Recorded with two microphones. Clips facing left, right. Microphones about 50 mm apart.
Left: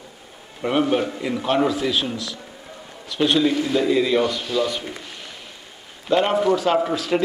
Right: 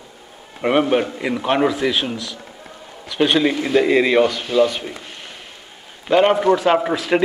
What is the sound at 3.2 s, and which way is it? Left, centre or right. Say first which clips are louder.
Speech: right 1 dB; right.